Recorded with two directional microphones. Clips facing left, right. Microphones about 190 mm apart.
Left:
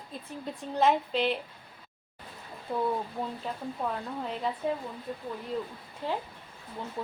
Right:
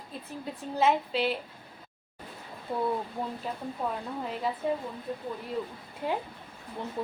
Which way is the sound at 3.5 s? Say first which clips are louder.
Even; 5° right (ahead or behind).